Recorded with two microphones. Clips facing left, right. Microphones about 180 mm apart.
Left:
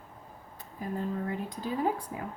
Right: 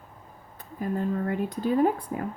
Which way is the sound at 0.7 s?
60° right (ahead or behind).